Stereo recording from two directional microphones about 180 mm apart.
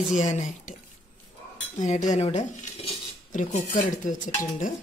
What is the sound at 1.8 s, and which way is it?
Speech, 40° left (ahead or behind).